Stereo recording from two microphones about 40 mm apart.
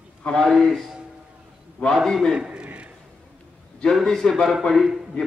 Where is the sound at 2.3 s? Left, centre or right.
Right.